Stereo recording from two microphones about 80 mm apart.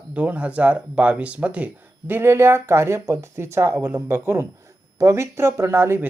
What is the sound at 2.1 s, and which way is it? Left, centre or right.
Speech, right.